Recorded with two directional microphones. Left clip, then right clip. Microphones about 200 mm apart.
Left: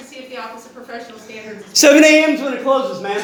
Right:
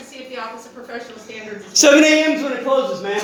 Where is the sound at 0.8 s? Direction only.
35° left (ahead or behind).